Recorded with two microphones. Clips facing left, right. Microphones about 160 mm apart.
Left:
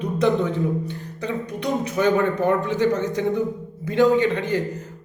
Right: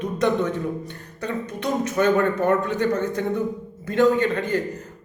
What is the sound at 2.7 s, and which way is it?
Speech, 60° right (ahead or behind).